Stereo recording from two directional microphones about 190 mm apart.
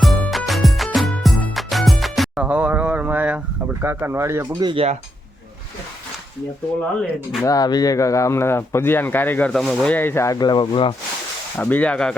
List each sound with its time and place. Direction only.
0.0 s music: centre (ahead or behind)
4.7 s speech: 30° right (ahead or behind)
7.4 s speech: 20° left (ahead or behind)
11.5 s speech: 10° left (ahead or behind)